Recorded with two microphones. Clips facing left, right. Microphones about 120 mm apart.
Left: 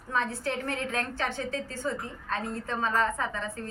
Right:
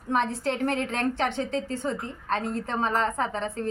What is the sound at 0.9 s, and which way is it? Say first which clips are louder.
A woman's voice: right 5 dB; 25° right (ahead or behind).